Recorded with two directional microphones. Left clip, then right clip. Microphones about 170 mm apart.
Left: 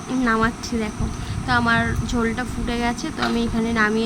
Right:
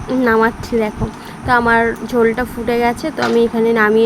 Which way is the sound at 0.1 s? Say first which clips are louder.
Right 7 dB; 5° right (ahead or behind).